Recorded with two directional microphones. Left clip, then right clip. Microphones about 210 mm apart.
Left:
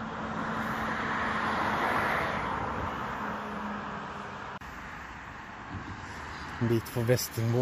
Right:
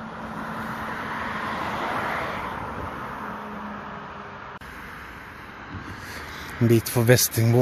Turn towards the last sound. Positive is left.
turn(degrees=-45)  # may be behind; listen again after turning